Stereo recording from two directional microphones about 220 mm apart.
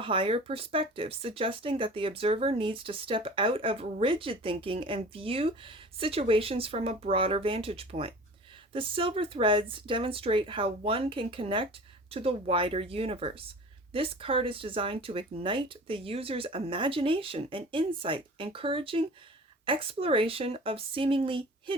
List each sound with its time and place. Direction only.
0.0 s speech: 25° right (ahead or behind)